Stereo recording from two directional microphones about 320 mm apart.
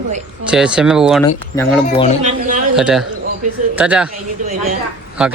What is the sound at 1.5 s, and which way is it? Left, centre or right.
Speech, centre.